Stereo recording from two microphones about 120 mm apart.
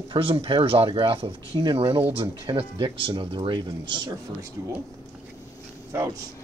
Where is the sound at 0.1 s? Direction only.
50° right (ahead or behind).